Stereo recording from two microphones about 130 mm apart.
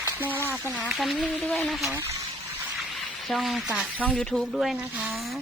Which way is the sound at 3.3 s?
Centre (ahead or behind).